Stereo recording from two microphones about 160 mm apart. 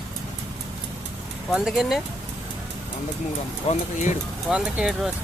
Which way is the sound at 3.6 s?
50° left (ahead or behind).